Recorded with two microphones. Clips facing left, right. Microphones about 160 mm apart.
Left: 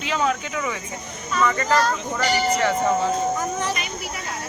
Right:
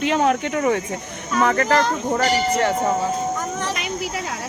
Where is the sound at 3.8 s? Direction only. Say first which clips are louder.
Right 5 dB; 90° right.